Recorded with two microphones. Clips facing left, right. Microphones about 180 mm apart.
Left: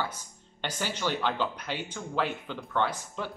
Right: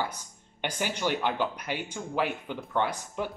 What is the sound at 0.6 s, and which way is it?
Speech, 15° right (ahead or behind).